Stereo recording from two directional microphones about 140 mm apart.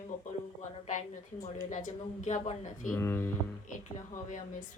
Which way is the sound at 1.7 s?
60° left (ahead or behind).